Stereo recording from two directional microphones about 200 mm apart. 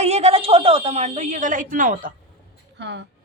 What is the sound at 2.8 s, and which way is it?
Speech, 60° right (ahead or behind).